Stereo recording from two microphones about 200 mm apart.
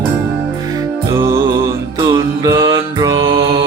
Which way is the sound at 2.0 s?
20° right (ahead or behind).